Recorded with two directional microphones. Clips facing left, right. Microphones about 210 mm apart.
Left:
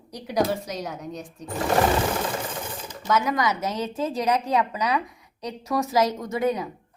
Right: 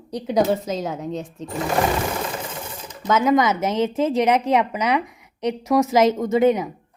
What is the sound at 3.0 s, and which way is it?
A woman's voice, 20° right (ahead or behind).